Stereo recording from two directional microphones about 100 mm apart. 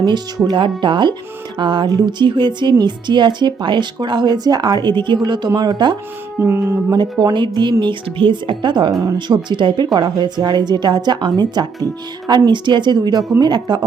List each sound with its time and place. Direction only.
0.4 s a woman's voice: 55° right (ahead or behind)
6.4 s speech: 25° right (ahead or behind)
6.9 s a woman's voice: 40° right (ahead or behind)